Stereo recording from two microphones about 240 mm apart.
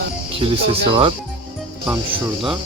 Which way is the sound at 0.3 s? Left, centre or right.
Right.